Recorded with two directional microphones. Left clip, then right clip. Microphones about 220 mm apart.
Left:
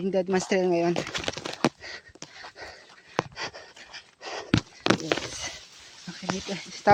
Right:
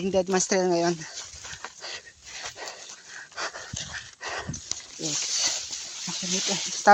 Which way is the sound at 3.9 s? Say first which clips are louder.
Right 1 dB; 30° left (ahead or behind).